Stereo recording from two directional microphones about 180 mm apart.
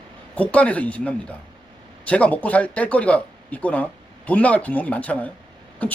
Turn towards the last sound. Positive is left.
turn(degrees=10)  # may be behind; listen again after turning